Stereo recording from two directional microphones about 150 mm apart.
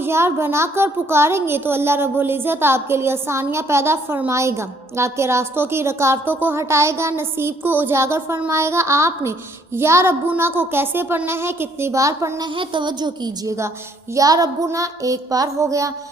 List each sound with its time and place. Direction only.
0.0 s a child's voice: 15° right (ahead or behind)
12.5 s music: 30° right (ahead or behind)